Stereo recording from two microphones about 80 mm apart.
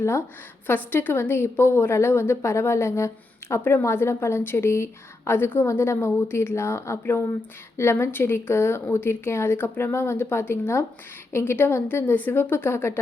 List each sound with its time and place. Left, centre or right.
0.0 s a woman's voice: left